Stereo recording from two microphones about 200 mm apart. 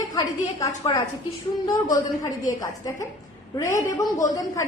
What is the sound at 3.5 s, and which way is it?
A woman's voice, 15° left (ahead or behind).